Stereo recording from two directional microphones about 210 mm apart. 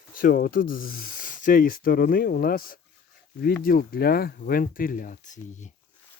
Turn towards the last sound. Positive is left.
turn(degrees=35)  # may be behind; listen again after turning